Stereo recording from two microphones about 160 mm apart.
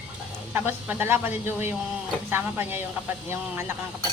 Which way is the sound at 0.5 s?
15° right (ahead or behind).